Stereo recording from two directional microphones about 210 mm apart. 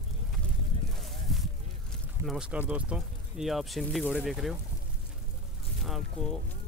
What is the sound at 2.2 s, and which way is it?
Speech, 5° right (ahead or behind).